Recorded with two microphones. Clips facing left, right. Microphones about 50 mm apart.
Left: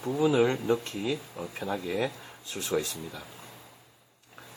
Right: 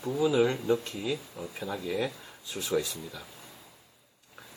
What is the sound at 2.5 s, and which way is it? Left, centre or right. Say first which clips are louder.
Speech: even; left.